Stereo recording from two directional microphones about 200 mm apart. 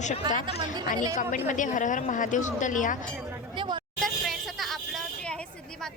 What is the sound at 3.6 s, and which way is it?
Vehicle, 20° right (ahead or behind).